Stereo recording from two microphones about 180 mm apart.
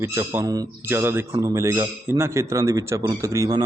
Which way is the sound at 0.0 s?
15° right (ahead or behind).